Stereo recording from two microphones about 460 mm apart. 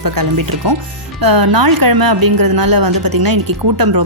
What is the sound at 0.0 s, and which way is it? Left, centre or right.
A woman's voice, right.